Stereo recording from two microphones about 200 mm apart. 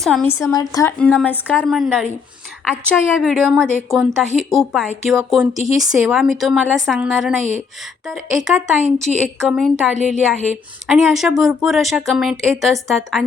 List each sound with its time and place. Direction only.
0.0 s a woman's voice: centre (ahead or behind)
0.3 s a woman's voice: 15° left (ahead or behind)
0.9 s a woman's voice: 5° left (ahead or behind)
9.9 s a woman's voice: 35° left (ahead or behind)
10.8 s a woman's voice: centre (ahead or behind)